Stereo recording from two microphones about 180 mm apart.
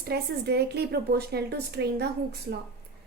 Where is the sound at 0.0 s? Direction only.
65° right (ahead or behind).